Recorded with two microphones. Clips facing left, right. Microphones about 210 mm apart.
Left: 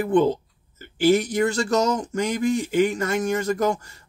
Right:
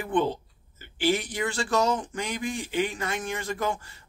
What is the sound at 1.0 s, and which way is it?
Speech, 45° left (ahead or behind).